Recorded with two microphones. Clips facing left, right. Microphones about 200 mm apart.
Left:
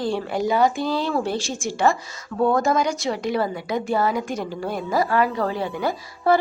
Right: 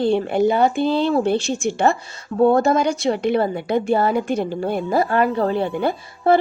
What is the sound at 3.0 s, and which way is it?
Speech, 60° right (ahead or behind).